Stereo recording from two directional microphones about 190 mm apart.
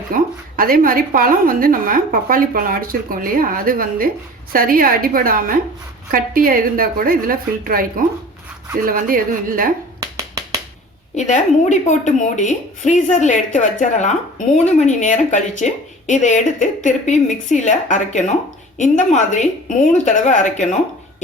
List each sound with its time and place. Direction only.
0.1 s a woman's voice: 50° right (ahead or behind)
10.0 s finger snapping: 20° right (ahead or behind)
11.1 s speech: 40° left (ahead or behind)